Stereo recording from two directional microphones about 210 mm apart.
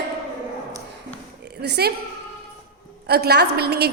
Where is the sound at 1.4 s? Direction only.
55° right (ahead or behind).